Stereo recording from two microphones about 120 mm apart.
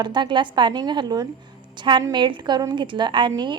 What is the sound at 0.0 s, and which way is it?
Speech, 40° right (ahead or behind).